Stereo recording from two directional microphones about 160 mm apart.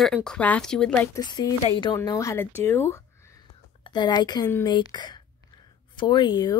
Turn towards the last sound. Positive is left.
turn(degrees=25)  # may be behind; listen again after turning